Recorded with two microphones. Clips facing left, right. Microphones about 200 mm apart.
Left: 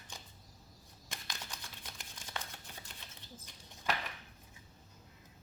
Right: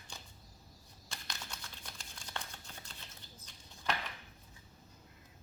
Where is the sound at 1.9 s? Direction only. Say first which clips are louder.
Left 1 dB; 15° left (ahead or behind).